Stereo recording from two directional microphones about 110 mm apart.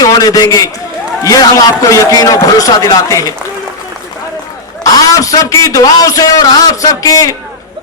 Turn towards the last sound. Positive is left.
turn(degrees=35)  # may be behind; listen again after turning